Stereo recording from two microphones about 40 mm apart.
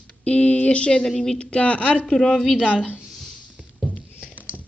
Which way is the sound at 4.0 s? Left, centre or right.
Left.